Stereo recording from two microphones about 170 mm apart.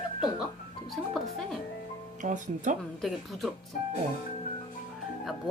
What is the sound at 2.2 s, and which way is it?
Speech, 45° right (ahead or behind).